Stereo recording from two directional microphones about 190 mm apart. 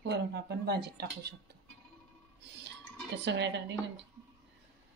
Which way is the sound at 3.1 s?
65° right (ahead or behind).